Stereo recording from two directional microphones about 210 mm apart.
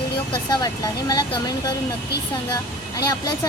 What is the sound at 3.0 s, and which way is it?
Speech, 20° left (ahead or behind).